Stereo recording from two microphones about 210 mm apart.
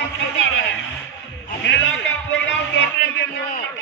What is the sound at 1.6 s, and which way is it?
Speech, 60° left (ahead or behind).